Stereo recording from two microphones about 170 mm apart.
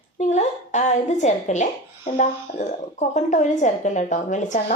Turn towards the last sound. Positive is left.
turn(degrees=45)  # may be behind; listen again after turning